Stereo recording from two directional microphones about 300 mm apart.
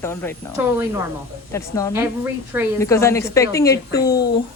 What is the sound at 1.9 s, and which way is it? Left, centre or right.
Speech, centre.